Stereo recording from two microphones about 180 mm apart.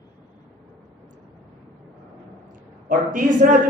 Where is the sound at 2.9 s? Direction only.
50° right (ahead or behind).